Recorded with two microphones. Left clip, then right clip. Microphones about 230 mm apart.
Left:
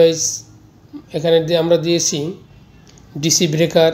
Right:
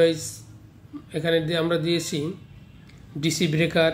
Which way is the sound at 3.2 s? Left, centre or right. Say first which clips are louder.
Left 8 dB; centre.